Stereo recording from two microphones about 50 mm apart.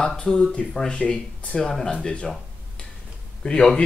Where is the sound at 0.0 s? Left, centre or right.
Centre.